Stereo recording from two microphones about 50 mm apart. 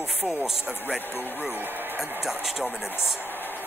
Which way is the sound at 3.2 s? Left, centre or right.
Left.